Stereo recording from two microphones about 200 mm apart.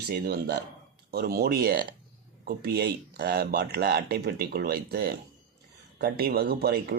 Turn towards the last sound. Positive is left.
turn(degrees=-50)  # may be behind; listen again after turning